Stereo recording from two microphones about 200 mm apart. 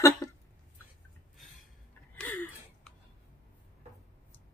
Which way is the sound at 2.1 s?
5° left (ahead or behind).